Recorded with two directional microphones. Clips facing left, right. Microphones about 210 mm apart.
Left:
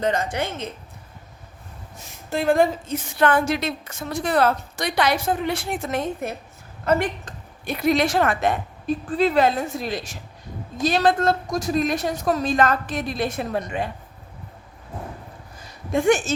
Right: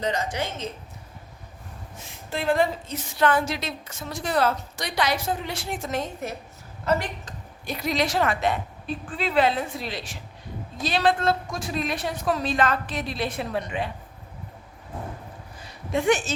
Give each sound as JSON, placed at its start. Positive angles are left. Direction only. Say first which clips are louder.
{"t": 0.0, "sound": "a woman's voice", "louder": "left 4 dB", "side_deg": 55}
{"t": 2.3, "sound": "a woman's voice", "louder": "left 4 dB", "side_deg": 45}
{"t": 15.6, "sound": "a sound", "louder": "left 4 dB", "side_deg": 45}